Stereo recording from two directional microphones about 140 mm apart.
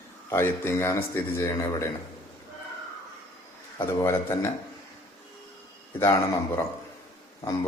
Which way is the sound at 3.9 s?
20° left (ahead or behind).